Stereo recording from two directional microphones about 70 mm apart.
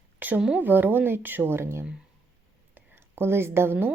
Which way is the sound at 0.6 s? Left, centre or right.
Right.